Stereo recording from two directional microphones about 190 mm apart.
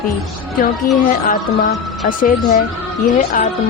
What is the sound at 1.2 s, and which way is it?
A woman's voice, 45° left (ahead or behind).